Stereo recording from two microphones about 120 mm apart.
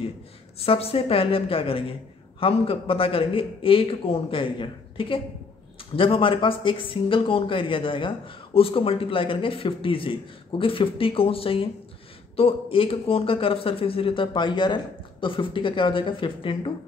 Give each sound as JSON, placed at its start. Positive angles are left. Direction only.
{"t": 0.6, "sound": "a man's voice", "side_deg": 55}